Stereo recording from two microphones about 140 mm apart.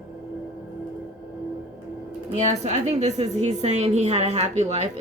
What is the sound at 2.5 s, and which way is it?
A woman's voice, 55° right (ahead or behind).